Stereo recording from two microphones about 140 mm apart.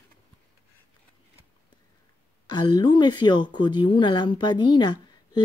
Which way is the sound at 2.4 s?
30° left (ahead or behind).